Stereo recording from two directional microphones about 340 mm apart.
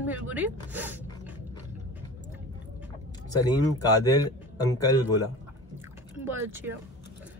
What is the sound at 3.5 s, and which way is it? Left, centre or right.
Speech, centre.